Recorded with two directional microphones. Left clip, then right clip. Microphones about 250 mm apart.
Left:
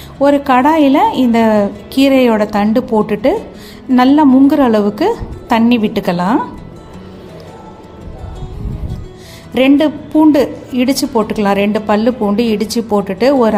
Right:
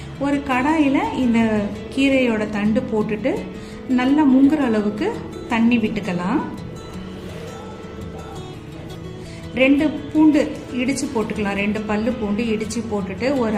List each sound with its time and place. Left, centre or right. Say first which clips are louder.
0.2 s a woman's voice: left 11 dB; left
9.6 s a woman's voice: left 6 dB; left